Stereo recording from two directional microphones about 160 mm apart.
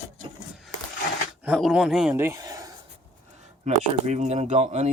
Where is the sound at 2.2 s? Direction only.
20° right (ahead or behind).